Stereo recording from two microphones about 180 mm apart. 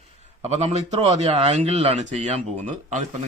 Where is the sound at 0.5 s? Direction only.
35° right (ahead or behind).